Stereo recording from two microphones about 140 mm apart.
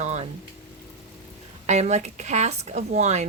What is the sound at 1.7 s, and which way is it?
A woman's voice, 55° right (ahead or behind).